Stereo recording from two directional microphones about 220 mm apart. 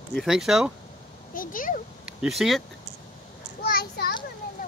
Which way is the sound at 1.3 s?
40° left (ahead or behind).